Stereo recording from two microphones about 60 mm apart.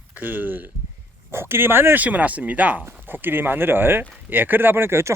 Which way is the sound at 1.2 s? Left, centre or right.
Right.